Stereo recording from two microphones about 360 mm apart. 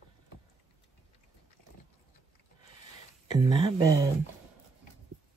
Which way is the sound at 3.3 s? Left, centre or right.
Centre.